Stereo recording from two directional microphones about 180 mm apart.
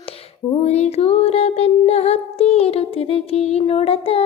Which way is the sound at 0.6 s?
35° left (ahead or behind).